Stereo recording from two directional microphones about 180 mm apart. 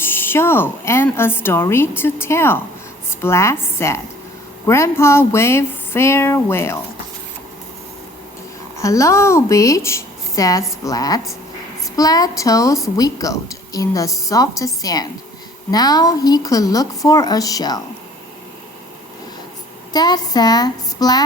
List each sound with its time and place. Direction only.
0.0 s a woman's voice: 10° left (ahead or behind)
8.8 s a woman's voice: 15° left (ahead or behind)
19.9 s speech: 20° left (ahead or behind)